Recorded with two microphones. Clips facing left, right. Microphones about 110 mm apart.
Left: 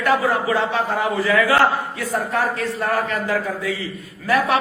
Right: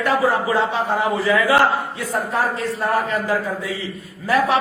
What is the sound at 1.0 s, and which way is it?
A man's voice, 25° right (ahead or behind).